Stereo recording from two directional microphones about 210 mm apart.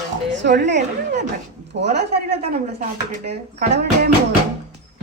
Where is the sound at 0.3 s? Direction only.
55° right (ahead or behind).